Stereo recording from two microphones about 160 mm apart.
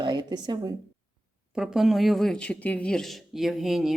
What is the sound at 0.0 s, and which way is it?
Speech, 25° right (ahead or behind).